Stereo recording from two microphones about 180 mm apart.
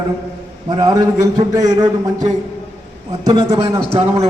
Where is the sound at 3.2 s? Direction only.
20° right (ahead or behind).